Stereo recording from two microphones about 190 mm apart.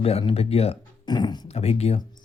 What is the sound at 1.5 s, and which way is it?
Speech, 35° left (ahead or behind).